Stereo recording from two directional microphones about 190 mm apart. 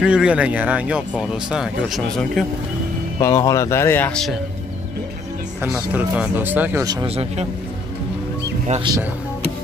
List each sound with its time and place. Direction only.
0.0 s speech: 5° right (ahead or behind)
3.2 s speech: 15° left (ahead or behind)
5.6 s speech: 5° right (ahead or behind)
8.8 s speech: 20° right (ahead or behind)